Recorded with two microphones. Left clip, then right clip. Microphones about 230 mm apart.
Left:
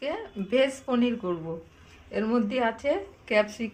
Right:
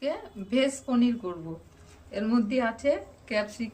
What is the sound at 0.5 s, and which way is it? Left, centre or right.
Speech, left.